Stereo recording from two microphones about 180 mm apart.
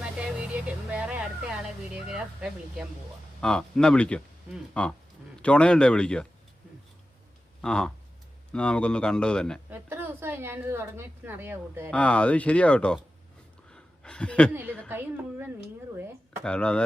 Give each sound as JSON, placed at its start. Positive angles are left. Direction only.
{"t": 0.0, "sound": "music", "side_deg": -5}
{"t": 2.0, "sound": "speech", "side_deg": -5}
{"t": 7.6, "sound": "speech", "side_deg": 5}
{"t": 9.6, "sound": "a woman's voice", "side_deg": -10}
{"t": 11.9, "sound": "speech", "side_deg": 5}
{"t": 13.7, "sound": "a sound", "side_deg": 5}
{"t": 14.8, "sound": "a woman's voice", "side_deg": -10}
{"t": 16.4, "sound": "speech", "side_deg": 5}